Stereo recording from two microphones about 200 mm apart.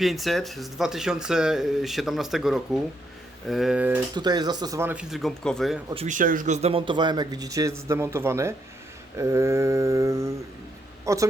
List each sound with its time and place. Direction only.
0.0 s speech: centre (ahead or behind)
4.1 s speech: 20° right (ahead or behind); by 5.8 s centre (ahead or behind)
5.9 s a man's voice: 30° right (ahead or behind)
6.1 s a man's voice: 40° right (ahead or behind); by 11.3 s 15° right (ahead or behind)